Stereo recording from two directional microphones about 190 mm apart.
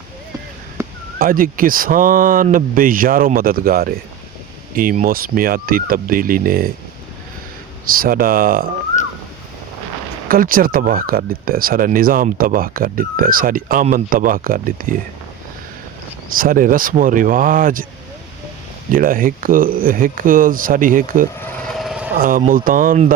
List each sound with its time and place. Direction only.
0.8 s a sound: 15° right (ahead or behind)
1.2 s speech: 45° right (ahead or behind)
7.9 s speech: 50° right (ahead or behind)
10.2 s speech: 50° right (ahead or behind)
16.3 s speech: 45° right (ahead or behind)
18.9 s speech: 45° right (ahead or behind)
21.7 s vehicle: centre (ahead or behind)
22.2 s speech: 45° right (ahead or behind)